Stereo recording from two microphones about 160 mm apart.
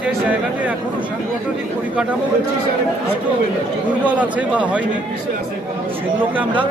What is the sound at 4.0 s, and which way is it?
Speech, 10° right (ahead or behind).